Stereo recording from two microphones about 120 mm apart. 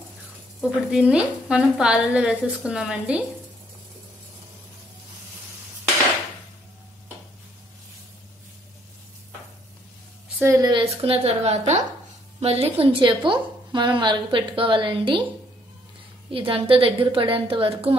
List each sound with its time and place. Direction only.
0.6 s sizzle: 5° right (ahead or behind)
10.4 s a woman's voice: 25° right (ahead or behind)
10.7 s a woman's voice: 50° right (ahead or behind)
16.3 s a woman's voice: 50° right (ahead or behind)